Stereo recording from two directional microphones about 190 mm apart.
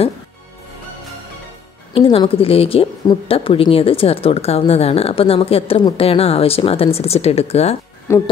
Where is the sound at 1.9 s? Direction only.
30° left (ahead or behind).